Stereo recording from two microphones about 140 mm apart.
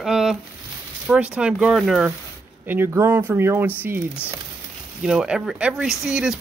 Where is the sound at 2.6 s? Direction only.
15° right (ahead or behind).